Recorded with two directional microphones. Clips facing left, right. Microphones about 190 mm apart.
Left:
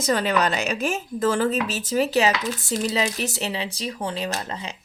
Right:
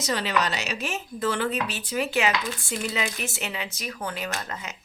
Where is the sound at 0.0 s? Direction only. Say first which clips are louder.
Left 5 dB; 50° left (ahead or behind).